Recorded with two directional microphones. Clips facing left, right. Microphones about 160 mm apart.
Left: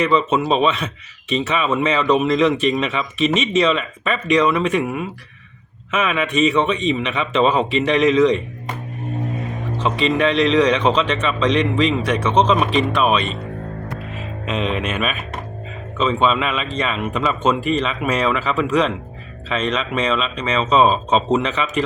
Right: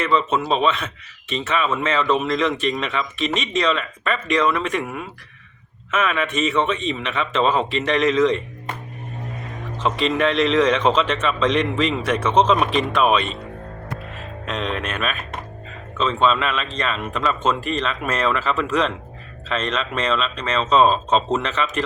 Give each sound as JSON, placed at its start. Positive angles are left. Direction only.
{"t": 0.0, "sound": "speech", "side_deg": 15}
{"t": 2.2, "sound": "speech", "side_deg": 5}
{"t": 6.0, "sound": "speech", "side_deg": 5}
{"t": 9.8, "sound": "speech", "side_deg": 0}